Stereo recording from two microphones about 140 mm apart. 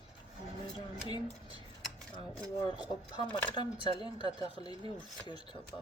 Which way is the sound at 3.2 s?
35° left (ahead or behind).